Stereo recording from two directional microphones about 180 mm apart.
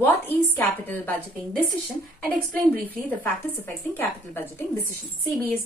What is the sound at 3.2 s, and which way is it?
A woman's voice, 10° left (ahead or behind).